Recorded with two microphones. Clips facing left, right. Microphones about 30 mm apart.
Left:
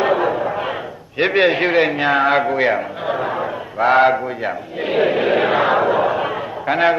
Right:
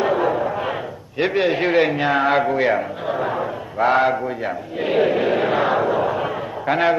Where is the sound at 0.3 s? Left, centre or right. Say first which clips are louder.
Left 1 dB; centre.